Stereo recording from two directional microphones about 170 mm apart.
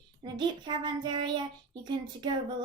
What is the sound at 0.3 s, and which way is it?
A child's voice, 25° right (ahead or behind).